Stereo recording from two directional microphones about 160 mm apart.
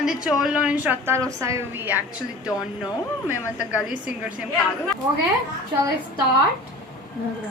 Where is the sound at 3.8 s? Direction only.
10° right (ahead or behind).